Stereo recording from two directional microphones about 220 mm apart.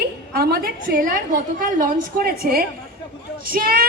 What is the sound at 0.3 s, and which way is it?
A woman's voice, 45° right (ahead or behind).